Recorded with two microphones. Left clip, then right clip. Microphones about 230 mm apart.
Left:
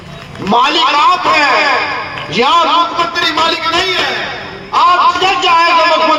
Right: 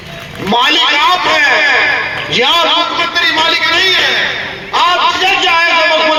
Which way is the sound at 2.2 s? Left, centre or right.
Left.